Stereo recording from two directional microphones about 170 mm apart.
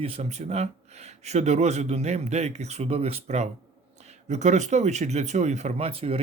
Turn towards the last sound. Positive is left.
turn(degrees=-35)  # may be behind; listen again after turning